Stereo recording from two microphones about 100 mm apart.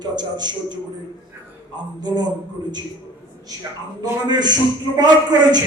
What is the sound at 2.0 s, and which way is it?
Speech, 45° right (ahead or behind).